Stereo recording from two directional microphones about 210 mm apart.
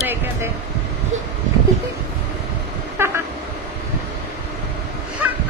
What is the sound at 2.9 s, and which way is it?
Train, 10° right (ahead or behind).